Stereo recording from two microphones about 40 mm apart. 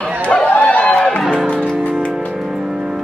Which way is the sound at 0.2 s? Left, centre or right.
Left.